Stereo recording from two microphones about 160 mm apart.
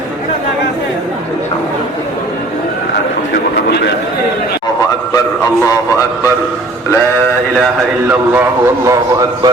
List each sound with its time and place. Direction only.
5.1 s a man's voice: 20° left (ahead or behind)
8.0 s a man's voice: 10° right (ahead or behind)